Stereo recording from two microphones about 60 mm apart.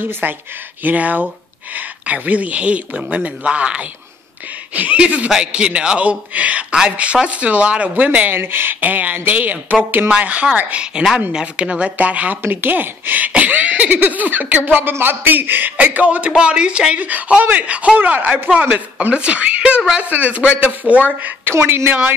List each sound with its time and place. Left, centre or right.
0.0 s a woman's voice: right
8.4 s a woman's voice: right
12.4 s a woman's voice: right
21.2 s a woman's voice: right